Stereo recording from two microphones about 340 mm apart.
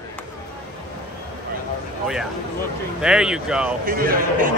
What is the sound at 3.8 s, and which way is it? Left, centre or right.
Speech, right.